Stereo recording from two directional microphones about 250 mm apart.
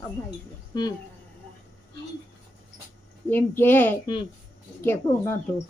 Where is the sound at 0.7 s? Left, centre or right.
Centre.